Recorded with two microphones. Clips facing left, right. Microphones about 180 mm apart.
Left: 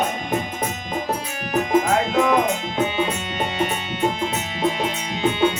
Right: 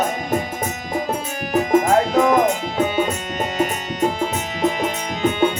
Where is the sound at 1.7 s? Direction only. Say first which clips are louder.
Right 3 dB; 45° right (ahead or behind).